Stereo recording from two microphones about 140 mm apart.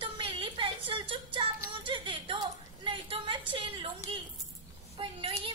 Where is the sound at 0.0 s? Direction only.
40° right (ahead or behind).